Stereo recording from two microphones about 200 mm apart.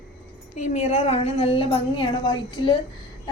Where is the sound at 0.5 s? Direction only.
35° left (ahead or behind).